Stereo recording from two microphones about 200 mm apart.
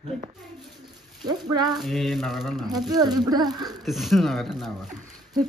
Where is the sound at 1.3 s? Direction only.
20° right (ahead or behind).